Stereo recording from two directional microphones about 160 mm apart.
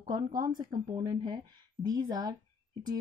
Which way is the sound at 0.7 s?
25° right (ahead or behind).